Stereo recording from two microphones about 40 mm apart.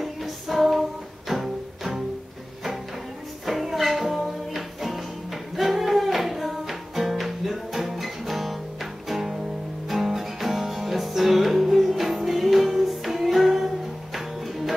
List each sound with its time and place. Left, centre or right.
0.0 s music: centre
3.4 s music: centre